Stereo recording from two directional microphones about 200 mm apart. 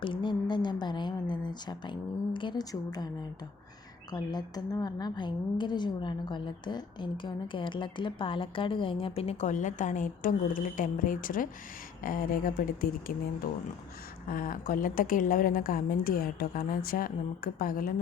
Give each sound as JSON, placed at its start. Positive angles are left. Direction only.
{"t": 0.0, "sound": "a sound", "side_deg": 25}
{"t": 1.5, "sound": "a woman's voice", "side_deg": 20}
{"t": 4.1, "sound": "a woman's voice", "side_deg": 20}